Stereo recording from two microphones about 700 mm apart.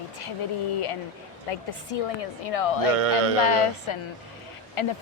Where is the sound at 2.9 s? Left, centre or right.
Right.